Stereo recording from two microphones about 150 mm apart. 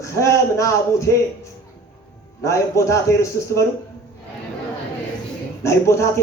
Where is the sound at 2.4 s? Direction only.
20° left (ahead or behind).